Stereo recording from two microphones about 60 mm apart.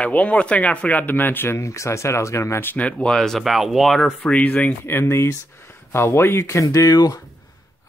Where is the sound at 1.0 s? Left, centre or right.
Left.